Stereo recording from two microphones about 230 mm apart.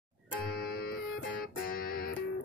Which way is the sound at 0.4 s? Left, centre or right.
Left.